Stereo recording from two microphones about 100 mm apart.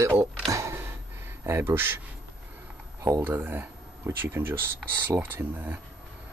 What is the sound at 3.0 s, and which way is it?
Speech, 30° right (ahead or behind).